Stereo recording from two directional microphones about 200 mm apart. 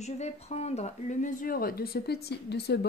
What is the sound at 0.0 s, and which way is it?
Speech, 35° left (ahead or behind).